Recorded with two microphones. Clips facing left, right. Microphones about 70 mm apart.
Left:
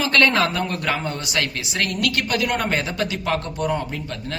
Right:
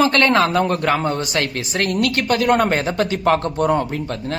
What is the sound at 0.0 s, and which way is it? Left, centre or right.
A woman's voice, right.